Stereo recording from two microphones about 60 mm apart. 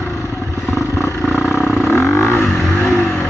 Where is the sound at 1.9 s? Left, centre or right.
Left.